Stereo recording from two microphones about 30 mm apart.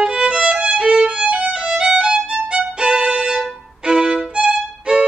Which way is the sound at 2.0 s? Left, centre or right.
Right.